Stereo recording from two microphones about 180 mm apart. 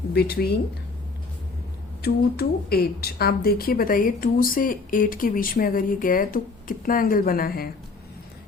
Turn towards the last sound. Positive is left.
turn(degrees=55)  # may be behind; listen again after turning